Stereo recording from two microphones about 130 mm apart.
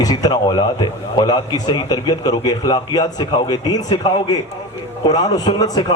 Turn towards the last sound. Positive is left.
turn(degrees=30)  # may be behind; listen again after turning